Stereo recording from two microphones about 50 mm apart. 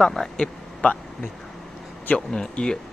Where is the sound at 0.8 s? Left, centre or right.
Left.